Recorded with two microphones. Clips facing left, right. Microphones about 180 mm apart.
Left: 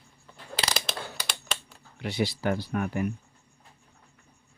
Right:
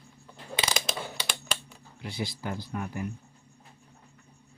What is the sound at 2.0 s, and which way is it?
Speech, 75° left (ahead or behind).